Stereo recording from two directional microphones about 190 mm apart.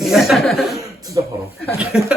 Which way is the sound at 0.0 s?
Centre (ahead or behind).